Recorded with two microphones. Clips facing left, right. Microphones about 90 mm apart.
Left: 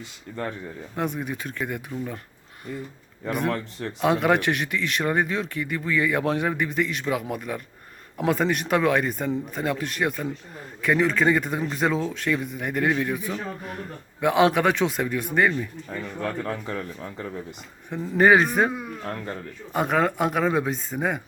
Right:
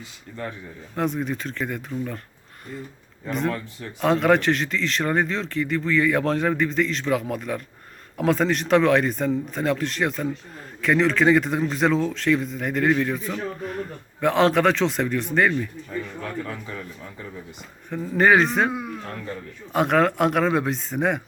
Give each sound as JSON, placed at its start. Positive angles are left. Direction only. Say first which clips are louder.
{"t": 0.9, "sound": "a man's voice", "louder": "right 3 dB", "side_deg": 10}
{"t": 3.2, "sound": "speech", "louder": "even", "side_deg": 60}
{"t": 4.0, "sound": "a man's voice", "louder": "right 2 dB", "side_deg": 10}
{"t": 16.2, "sound": "speech", "louder": "left 3 dB", "side_deg": 45}
{"t": 17.9, "sound": "a man's voice", "louder": "even", "side_deg": 15}
{"t": 19.7, "sound": "speech", "louder": "right 3 dB", "side_deg": 0}